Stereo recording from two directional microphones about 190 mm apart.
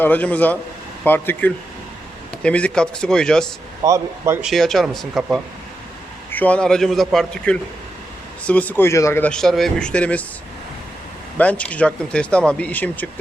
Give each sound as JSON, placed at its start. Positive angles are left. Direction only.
{"t": 0.0, "sound": "a man's voice", "side_deg": 10}
{"t": 3.8, "sound": "speech", "side_deg": -15}
{"t": 4.4, "sound": "a man's voice", "side_deg": 0}
{"t": 11.3, "sound": "speech", "side_deg": 5}